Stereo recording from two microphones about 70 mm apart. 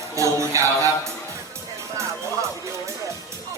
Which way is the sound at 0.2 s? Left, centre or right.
Right.